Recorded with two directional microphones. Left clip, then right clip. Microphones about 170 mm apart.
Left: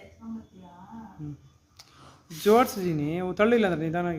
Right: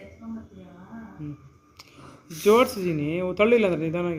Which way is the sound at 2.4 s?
35° left (ahead or behind).